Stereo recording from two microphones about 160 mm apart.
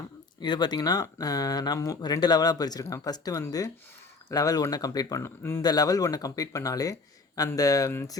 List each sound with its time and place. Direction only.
0.4 s speech: 25° left (ahead or behind)